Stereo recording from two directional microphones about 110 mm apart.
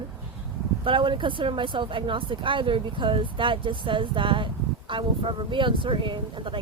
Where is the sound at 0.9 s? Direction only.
50° right (ahead or behind).